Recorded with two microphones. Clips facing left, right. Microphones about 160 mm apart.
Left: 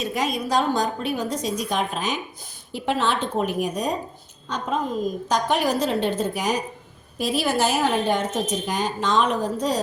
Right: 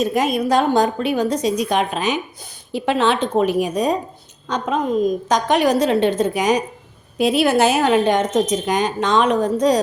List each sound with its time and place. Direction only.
0.0 s a woman's voice: 50° right (ahead or behind); by 2.1 s 75° right (ahead or behind)
2.7 s a woman's voice: 85° right
7.2 s a woman's voice: 70° right (ahead or behind)